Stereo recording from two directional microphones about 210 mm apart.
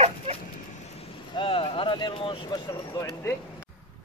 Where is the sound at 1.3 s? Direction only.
25° left (ahead or behind).